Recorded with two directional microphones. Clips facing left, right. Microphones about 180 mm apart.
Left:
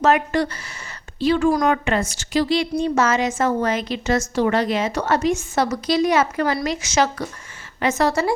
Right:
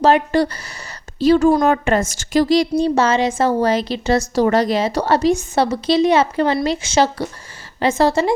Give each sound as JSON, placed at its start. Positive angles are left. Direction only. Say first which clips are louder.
{"t": 0.0, "sound": "a woman's voice", "louder": "right 4 dB", "side_deg": -30}